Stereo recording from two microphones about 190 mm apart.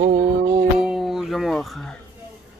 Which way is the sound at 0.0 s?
40° right (ahead or behind).